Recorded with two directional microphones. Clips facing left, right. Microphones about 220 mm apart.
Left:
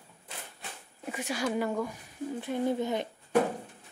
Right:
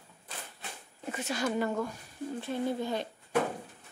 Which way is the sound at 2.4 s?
15° left (ahead or behind).